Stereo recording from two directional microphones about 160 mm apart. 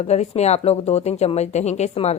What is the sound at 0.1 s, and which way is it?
A woman's voice, 45° left (ahead or behind).